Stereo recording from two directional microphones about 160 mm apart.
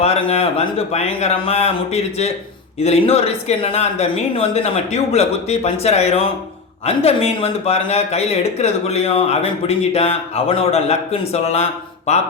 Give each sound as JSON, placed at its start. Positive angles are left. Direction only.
{"t": 0.0, "sound": "speech", "side_deg": 40}